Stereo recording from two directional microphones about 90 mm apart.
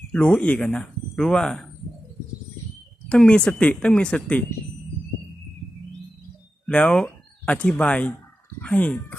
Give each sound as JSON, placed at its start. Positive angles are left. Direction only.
{"t": 0.1, "sound": "speech", "side_deg": 15}
{"t": 3.1, "sound": "speech", "side_deg": 10}
{"t": 6.7, "sound": "speech", "side_deg": 10}